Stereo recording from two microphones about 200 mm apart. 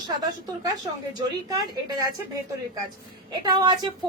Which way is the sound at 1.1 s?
20° right (ahead or behind).